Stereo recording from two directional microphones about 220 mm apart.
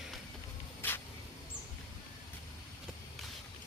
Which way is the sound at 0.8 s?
10° left (ahead or behind).